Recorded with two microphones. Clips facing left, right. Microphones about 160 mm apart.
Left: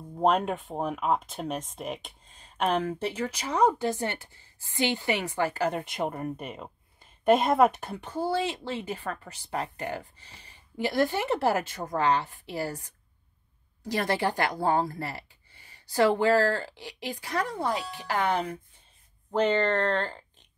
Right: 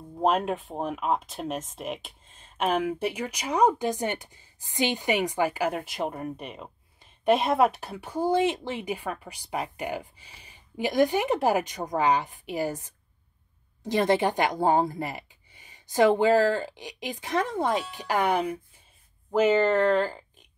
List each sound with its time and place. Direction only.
0.1 s speech: 5° right (ahead or behind)
5.8 s speech: centre (ahead or behind)